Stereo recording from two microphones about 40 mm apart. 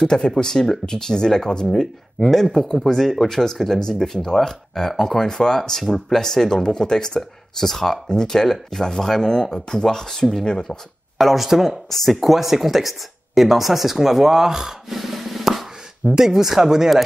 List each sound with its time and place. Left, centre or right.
0.0 s speech: centre
2.1 s speech: centre
11.1 s speech: centre
11.9 s speech: centre